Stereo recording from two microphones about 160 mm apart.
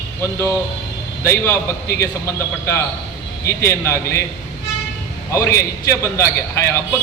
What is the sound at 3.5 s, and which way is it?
Speech, 15° left (ahead or behind).